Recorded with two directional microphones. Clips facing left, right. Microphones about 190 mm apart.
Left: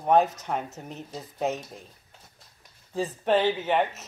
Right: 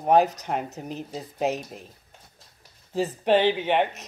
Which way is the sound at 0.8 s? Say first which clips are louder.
Right 4 dB; centre (ahead or behind).